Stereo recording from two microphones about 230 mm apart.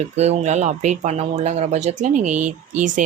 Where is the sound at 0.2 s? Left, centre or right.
Right.